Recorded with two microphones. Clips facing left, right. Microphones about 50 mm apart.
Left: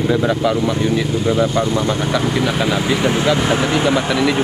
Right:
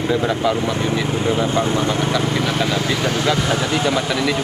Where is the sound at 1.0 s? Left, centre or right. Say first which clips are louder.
Left 2 dB; right.